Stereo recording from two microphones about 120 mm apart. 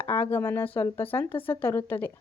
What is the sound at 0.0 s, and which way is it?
A woman's voice, 20° left (ahead or behind).